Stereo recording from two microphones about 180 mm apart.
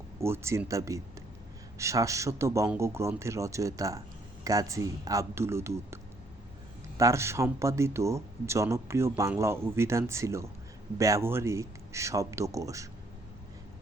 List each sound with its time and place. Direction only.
0.2 s speech: 15° right (ahead or behind)